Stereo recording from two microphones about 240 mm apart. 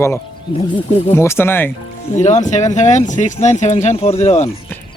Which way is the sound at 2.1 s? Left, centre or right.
Left.